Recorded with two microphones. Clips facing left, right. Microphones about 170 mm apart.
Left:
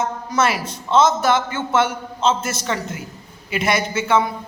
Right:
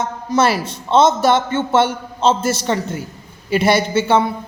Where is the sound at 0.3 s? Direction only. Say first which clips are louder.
Right 6 dB; 30° right (ahead or behind).